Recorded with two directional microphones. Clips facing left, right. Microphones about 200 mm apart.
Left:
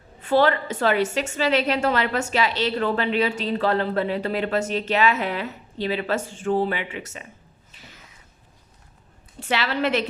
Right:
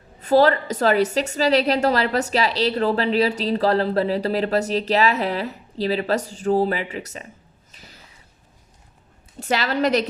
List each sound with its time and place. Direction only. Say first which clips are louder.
0.2 s a woman's voice: right 3 dB; 40° right (ahead or behind)
7.7 s a sound: right 1 dB; 40° right (ahead or behind)
9.4 s a woman's voice: right 3 dB; 40° right (ahead or behind)